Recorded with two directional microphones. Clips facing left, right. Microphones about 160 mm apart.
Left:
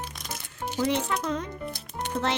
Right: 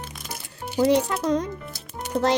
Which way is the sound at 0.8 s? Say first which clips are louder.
Right 7 dB; 35° right (ahead or behind).